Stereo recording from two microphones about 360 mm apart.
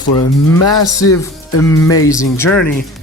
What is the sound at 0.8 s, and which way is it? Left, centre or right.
Speech, centre.